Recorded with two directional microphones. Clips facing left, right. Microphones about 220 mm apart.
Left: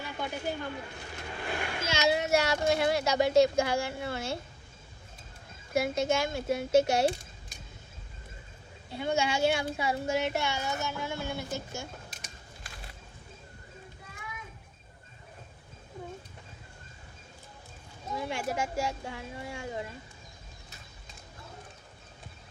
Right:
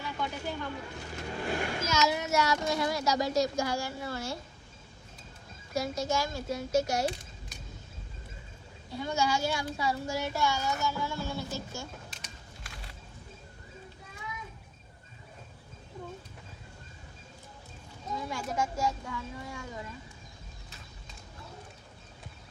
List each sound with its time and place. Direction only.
0.0 s speech: 50° left (ahead or behind)
1.1 s vehicle: 40° right (ahead or behind)
1.9 s speech: 30° left (ahead or behind)
5.7 s speech: 25° left (ahead or behind)
8.9 s speech: 25° left (ahead or behind)
18.2 s speech: 25° left (ahead or behind)